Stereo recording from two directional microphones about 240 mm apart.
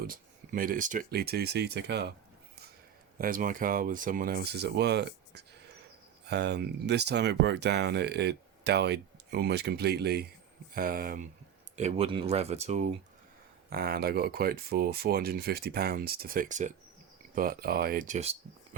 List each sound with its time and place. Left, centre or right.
0.1 s speech: right
3.2 s speech: right
11.8 s speech: right
13.7 s speech: right